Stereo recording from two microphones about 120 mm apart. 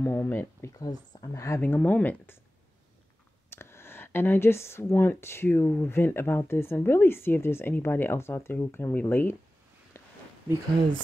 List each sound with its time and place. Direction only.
0.0 s speech: 20° left (ahead or behind)
0.7 s speech: 35° left (ahead or behind)
1.6 s speech: 15° left (ahead or behind)
3.4 s speech: 20° left (ahead or behind)
9.9 s a sound: 25° left (ahead or behind)